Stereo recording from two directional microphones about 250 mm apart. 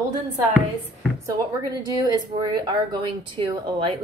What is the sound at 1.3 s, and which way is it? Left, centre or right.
Speech, centre.